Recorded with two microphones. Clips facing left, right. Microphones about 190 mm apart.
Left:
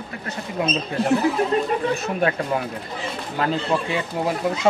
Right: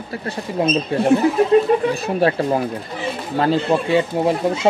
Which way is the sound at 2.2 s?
30° right (ahead or behind).